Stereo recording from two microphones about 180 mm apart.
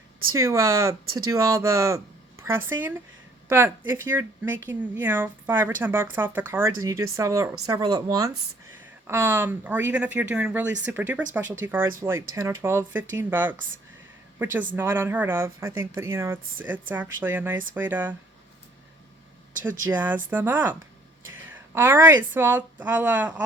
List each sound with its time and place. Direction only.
0.3 s speech: 15° right (ahead or behind)
10.7 s speech: 85° right
10.9 s speech: 10° right (ahead or behind)
14.8 s speech: 10° right (ahead or behind)
19.6 s speech: 10° right (ahead or behind)
21.8 s speech: 15° right (ahead or behind)